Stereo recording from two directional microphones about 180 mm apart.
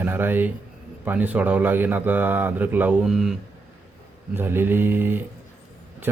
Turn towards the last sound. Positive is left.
turn(degrees=-10)  # may be behind; listen again after turning